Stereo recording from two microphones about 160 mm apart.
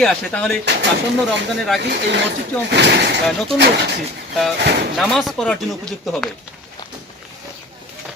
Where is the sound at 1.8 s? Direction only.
90° right.